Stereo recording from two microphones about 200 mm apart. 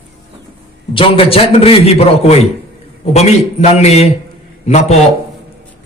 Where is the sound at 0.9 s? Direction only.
25° left (ahead or behind).